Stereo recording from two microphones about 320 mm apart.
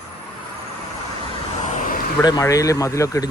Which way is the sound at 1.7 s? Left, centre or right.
Left.